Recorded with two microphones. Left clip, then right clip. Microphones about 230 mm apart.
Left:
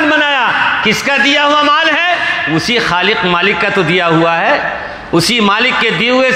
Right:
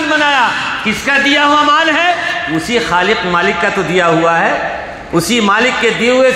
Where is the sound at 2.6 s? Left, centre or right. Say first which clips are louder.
Right 1 dB; left.